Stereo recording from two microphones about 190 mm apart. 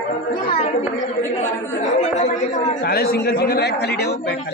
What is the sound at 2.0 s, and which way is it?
Speech, 40° left (ahead or behind).